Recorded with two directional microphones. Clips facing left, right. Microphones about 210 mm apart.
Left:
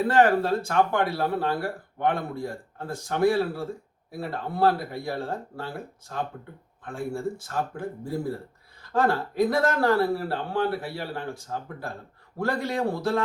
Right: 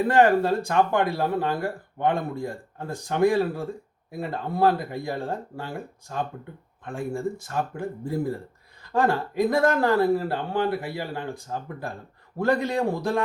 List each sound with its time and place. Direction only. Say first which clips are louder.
0.1 s speech: right 2 dB; 15° right (ahead or behind)